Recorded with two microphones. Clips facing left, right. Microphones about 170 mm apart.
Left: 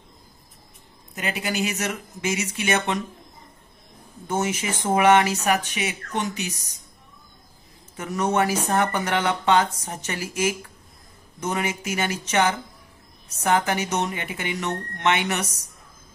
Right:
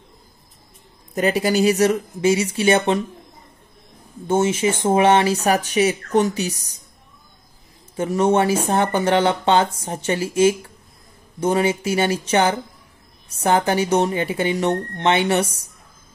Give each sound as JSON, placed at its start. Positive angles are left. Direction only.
{"t": 1.1, "sound": "speech", "side_deg": -40}
{"t": 4.3, "sound": "speech", "side_deg": -25}
{"t": 7.9, "sound": "speech", "side_deg": -30}